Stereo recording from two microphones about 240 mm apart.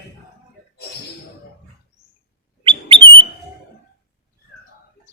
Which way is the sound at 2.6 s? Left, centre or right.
Right.